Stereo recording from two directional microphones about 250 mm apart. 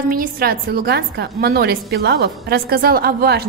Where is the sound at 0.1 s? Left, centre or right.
Right.